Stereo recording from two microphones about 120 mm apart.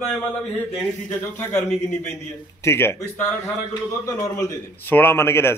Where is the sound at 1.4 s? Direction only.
20° left (ahead or behind).